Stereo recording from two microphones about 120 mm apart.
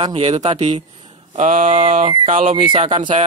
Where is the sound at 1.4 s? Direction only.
90° right; by 2.1 s 75° right (ahead or behind).